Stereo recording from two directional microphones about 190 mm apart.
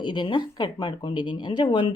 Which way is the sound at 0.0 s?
25° left (ahead or behind).